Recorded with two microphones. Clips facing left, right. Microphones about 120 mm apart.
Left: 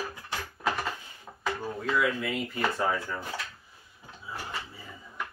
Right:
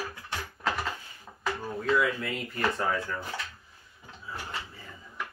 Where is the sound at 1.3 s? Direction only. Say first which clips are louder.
Left 3 dB; 20° left (ahead or behind).